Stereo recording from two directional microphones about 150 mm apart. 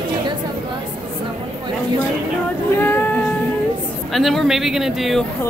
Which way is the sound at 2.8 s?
15° left (ahead or behind).